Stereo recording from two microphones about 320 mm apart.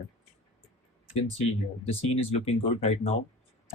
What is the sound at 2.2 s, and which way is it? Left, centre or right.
Speech, centre.